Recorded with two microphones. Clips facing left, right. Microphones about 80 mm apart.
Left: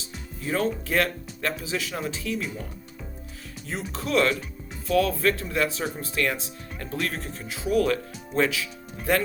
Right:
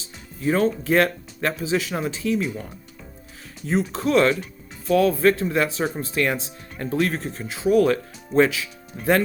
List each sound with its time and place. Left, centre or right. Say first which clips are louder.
0.4 s speech: right 6 dB; right
3.7 s speech: right 7 dB; right